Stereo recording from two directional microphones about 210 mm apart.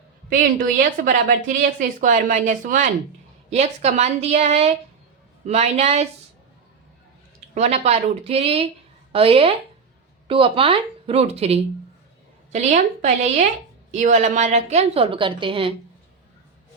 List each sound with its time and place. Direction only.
0.8 s a woman's voice: 40° right (ahead or behind)
7.5 s a woman's voice: 30° right (ahead or behind)